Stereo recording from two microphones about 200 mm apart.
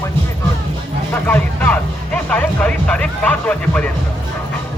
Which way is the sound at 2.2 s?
5° left (ahead or behind).